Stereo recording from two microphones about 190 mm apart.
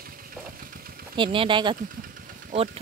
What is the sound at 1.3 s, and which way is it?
Speech, 25° right (ahead or behind).